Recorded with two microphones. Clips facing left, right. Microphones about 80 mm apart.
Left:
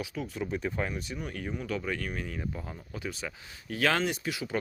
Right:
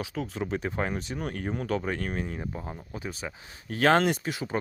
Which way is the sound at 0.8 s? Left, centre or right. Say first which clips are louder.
Right 3 dB; right.